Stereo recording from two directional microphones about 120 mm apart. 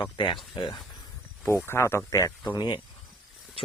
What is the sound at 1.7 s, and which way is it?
Speech, 20° left (ahead or behind).